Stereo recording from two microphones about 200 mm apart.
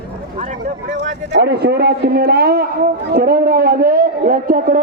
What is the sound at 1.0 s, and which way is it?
A man's voice, 50° right (ahead or behind).